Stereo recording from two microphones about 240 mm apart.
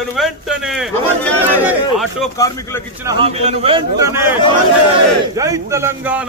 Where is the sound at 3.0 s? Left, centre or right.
Right.